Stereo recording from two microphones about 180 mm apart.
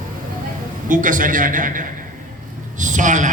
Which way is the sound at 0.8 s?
45° right (ahead or behind).